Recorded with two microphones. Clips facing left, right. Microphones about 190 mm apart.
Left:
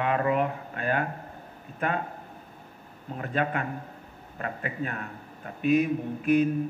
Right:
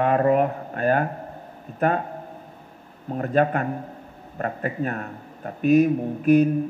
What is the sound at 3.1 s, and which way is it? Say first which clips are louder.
A man's voice: right 8 dB; 45° right (ahead or behind).